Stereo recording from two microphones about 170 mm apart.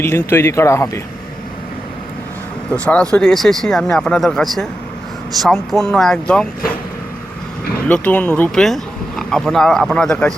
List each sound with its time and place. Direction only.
0.3 s speech: 15° left (ahead or behind)
2.7 s speech: 5° left (ahead or behind)
7.9 s speech: 10° left (ahead or behind)